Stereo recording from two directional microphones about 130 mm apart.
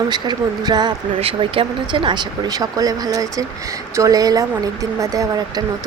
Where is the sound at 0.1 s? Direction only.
30° right (ahead or behind).